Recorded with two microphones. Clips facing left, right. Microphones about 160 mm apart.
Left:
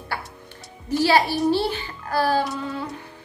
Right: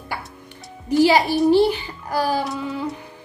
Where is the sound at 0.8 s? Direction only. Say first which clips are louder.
Right 3 dB; 15° right (ahead or behind).